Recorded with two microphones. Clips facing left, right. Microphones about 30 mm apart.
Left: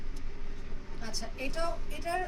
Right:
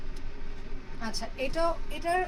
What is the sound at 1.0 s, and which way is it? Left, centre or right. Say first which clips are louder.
A woman's voice: right 5 dB; right.